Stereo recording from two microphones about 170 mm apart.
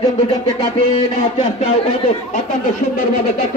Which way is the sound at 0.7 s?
35° left (ahead or behind).